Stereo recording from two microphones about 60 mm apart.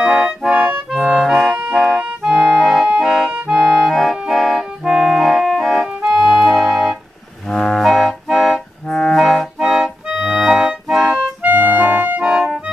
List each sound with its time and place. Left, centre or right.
0.0 s music: centre
1.5 s music: right
2.2 s accordion: centre
6.0 s organ: centre
7.4 s clarinet: centre
7.8 s music: centre
10.2 s accordion: centre
10.9 s music: centre
11.4 s clarinet: right
12.2 s organ: centre